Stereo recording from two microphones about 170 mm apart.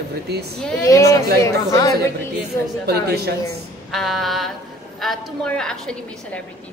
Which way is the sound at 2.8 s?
70° right (ahead or behind).